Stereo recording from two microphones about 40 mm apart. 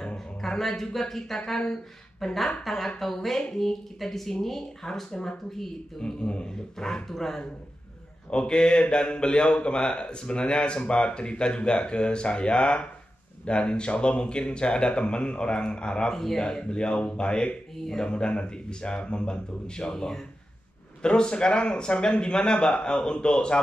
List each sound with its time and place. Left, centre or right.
0.4 s a man's voice: centre
8.3 s a man's voice: left
16.1 s speech: centre
16.4 s a man's voice: left